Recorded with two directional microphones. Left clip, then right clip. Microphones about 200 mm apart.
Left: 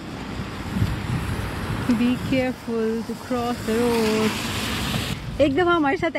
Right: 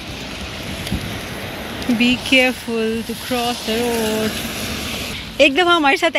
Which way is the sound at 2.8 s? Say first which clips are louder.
Right 4 dB; 5° left (ahead or behind).